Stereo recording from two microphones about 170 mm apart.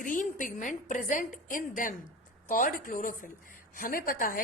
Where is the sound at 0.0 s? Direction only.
50° left (ahead or behind).